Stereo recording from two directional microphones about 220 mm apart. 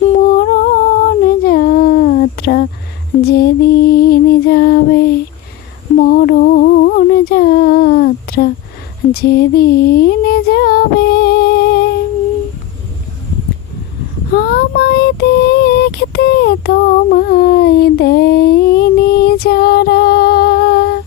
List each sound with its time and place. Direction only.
0.0 s humming: 40° left (ahead or behind)
3.2 s music: 45° left (ahead or behind)
6.0 s a sound: 40° left (ahead or behind)
14.3 s child singing: 45° left (ahead or behind)